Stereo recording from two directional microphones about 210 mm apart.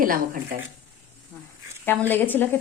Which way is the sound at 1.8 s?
10° left (ahead or behind).